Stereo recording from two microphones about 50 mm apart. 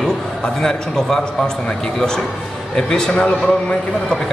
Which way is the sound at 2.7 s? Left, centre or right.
Centre.